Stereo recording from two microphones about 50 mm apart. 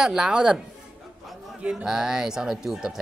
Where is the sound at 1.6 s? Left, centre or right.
Right.